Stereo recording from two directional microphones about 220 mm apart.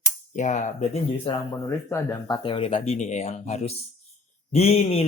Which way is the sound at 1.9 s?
15° left (ahead or behind).